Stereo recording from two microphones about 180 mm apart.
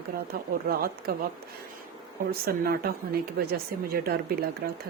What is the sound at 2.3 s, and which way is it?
Speech, 55° right (ahead or behind).